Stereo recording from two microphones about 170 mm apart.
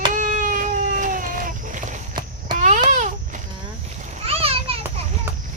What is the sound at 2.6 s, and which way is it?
Baby cry, 45° right (ahead or behind).